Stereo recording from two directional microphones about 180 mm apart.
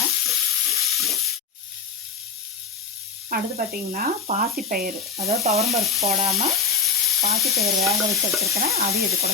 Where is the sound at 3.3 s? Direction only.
50° right (ahead or behind).